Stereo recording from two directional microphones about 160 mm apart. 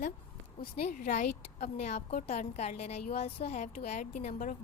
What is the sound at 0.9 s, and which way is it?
Speech, 55° left (ahead or behind).